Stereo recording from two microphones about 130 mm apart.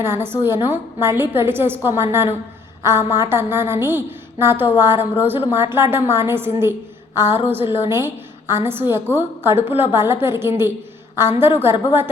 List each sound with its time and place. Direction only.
0.0 s a woman's voice: 20° right (ahead or behind)